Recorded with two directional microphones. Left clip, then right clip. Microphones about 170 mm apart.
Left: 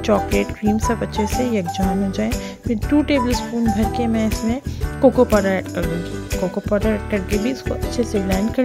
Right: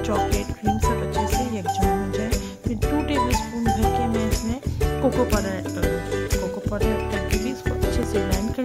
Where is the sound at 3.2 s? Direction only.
Centre (ahead or behind).